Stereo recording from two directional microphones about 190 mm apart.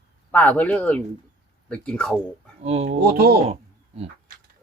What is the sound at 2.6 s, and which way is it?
Speech, 35° right (ahead or behind).